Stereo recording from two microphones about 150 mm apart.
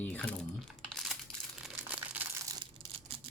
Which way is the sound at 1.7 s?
15° right (ahead or behind).